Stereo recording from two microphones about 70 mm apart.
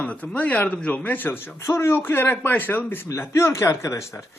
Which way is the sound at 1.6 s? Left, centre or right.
Left.